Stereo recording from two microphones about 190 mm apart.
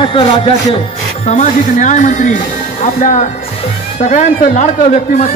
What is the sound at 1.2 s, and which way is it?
Speech, 40° left (ahead or behind).